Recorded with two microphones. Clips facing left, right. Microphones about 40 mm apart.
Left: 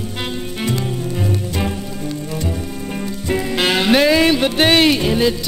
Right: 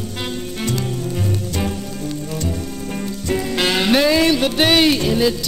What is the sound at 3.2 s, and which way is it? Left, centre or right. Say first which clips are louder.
Music: left 1 dB; centre.